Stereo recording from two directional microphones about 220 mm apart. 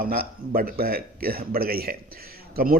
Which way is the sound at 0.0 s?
40° right (ahead or behind).